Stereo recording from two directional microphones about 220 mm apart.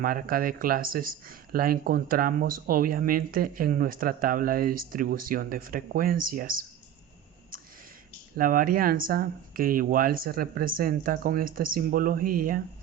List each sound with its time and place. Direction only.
0.0 s speech: 40° right (ahead or behind)
8.4 s speech: 40° right (ahead or behind)